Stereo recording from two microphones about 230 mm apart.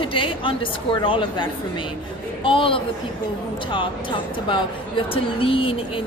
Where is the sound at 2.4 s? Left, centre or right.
Left.